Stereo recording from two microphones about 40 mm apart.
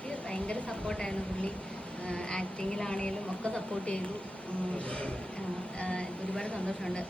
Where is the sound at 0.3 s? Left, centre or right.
Left.